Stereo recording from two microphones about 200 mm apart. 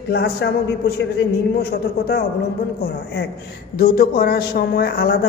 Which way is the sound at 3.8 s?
45° left (ahead or behind).